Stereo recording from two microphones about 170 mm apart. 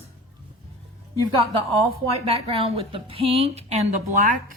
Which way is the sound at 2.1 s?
35° right (ahead or behind).